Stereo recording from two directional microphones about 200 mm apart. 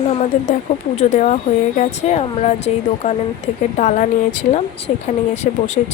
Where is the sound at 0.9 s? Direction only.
35° left (ahead or behind).